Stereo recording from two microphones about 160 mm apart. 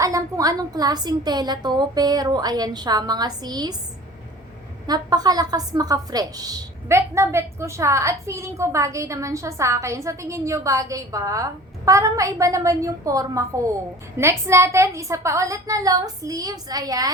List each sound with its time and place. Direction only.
0.0 s a woman's voice: 20° right (ahead or behind)
4.9 s a woman's voice: 25° right (ahead or behind)